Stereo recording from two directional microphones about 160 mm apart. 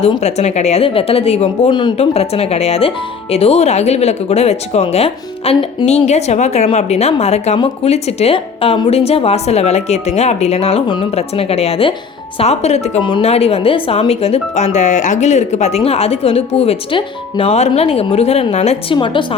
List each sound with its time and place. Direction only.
0.0 s speech: 45° left (ahead or behind)
13.0 s speech: 30° left (ahead or behind)
18.9 s speech: 30° left (ahead or behind)